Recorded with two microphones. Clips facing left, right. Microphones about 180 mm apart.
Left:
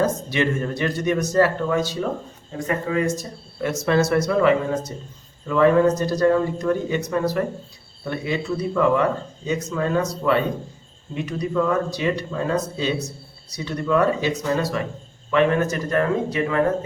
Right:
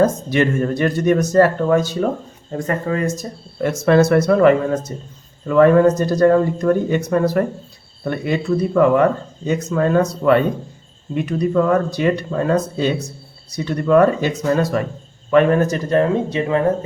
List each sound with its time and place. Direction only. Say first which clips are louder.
0.0 s speech: right 5 dB; 50° right (ahead or behind); by 16.6 s 25° right (ahead or behind)